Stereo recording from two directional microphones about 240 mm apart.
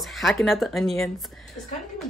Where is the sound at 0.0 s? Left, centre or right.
Centre.